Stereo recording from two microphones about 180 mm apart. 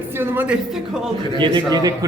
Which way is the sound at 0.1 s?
10° right (ahead or behind).